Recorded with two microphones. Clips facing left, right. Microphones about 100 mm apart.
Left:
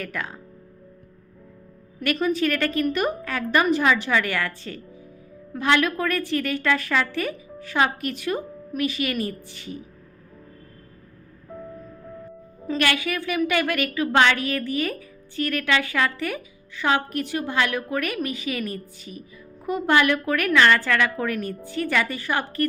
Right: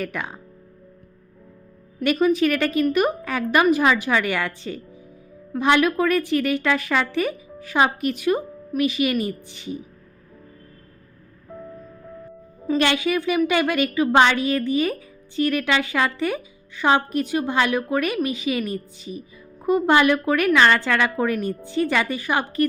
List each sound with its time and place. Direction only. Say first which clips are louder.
0.0 s a woman's voice: right 3 dB; 20° right (ahead or behind)
2.2 s a woman's voice: right 4 dB; 15° right (ahead or behind)
12.7 s a woman's voice: right 4 dB; 20° right (ahead or behind)